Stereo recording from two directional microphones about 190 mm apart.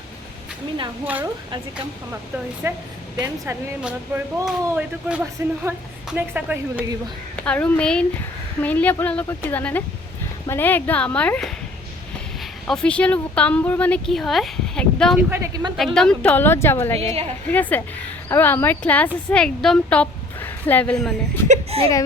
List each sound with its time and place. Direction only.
1.0 s speech: 10° right (ahead or behind)
2.6 s speech: 15° right (ahead or behind)
3.8 s speech: 5° right (ahead or behind)
7.4 s speech: 5° left (ahead or behind)
15.3 s speech: 15° right (ahead or behind)
16.0 s a woman's voice: 5° left (ahead or behind)
21.4 s speech: 35° right (ahead or behind)